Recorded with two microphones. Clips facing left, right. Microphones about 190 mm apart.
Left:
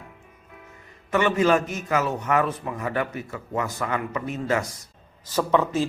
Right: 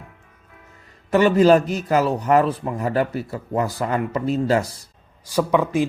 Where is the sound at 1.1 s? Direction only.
35° right (ahead or behind).